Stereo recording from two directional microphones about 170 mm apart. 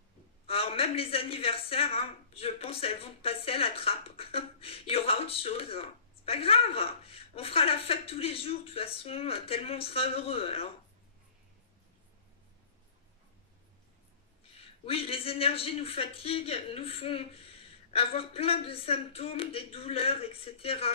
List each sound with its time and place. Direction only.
0.5 s a woman's voice: 35° left (ahead or behind)
14.5 s a woman's voice: 35° left (ahead or behind)